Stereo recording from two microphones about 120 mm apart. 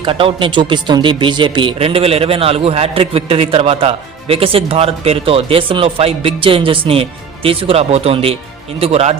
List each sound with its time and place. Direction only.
0.0 s speech: 50° right (ahead or behind)